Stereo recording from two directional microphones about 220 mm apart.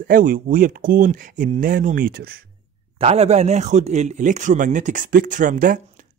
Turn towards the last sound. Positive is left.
turn(degrees=-35)  # may be behind; listen again after turning